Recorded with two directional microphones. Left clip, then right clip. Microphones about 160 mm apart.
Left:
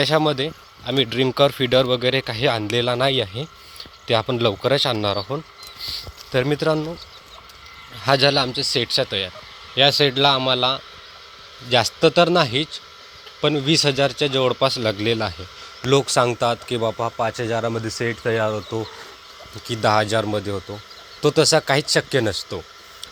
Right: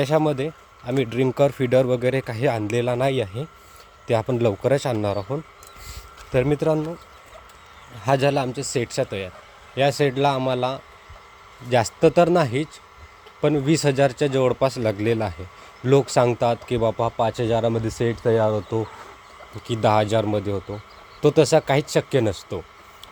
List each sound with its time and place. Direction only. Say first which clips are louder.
0.0 s speech: left 2 dB; 10° right (ahead or behind)
8.0 s speech: left 3 dB; 10° right (ahead or behind); by 14.4 s 25° right (ahead or behind)
14.4 s speech: left 2 dB; 15° right (ahead or behind)
17.2 s speech: right 1 dB; 30° right (ahead or behind)
19.6 s speech: left 1 dB; 20° right (ahead or behind)